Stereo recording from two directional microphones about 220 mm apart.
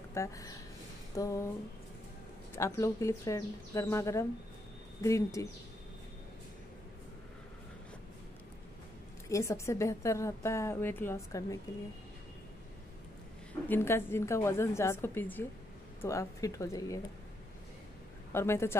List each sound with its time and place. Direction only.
0.1 s a woman's voice: 15° left (ahead or behind)
2.5 s a woman's voice: 15° left (ahead or behind)
9.3 s a woman's voice: 15° left (ahead or behind)
13.7 s a woman's voice: 10° left (ahead or behind)
18.3 s a woman's voice: 10° left (ahead or behind)